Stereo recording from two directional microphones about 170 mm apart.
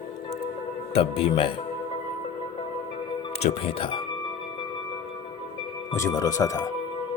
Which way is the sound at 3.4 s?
35° left (ahead or behind).